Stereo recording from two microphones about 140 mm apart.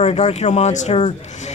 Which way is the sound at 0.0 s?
50° left (ahead or behind).